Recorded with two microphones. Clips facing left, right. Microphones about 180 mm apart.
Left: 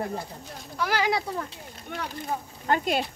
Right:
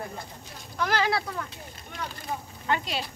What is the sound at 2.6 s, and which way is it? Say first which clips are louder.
Speech: left 4 dB; 45° left (ahead or behind).